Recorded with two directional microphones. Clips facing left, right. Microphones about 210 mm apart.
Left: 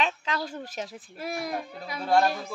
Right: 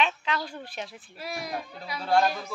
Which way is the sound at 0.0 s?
35° left (ahead or behind).